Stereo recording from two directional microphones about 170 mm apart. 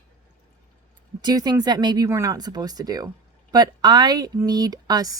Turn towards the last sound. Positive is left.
turn(degrees=-20)  # may be behind; listen again after turning